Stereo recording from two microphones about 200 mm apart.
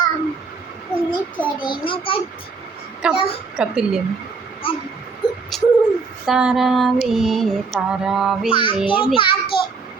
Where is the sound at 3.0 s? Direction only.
5° right (ahead or behind).